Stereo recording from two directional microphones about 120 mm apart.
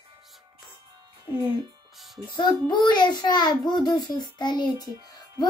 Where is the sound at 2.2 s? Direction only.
40° left (ahead or behind).